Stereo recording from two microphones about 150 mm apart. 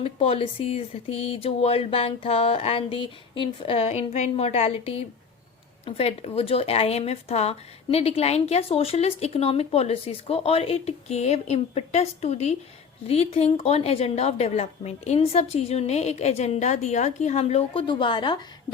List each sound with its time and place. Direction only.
0.0 s a woman's voice: 40° left (ahead or behind)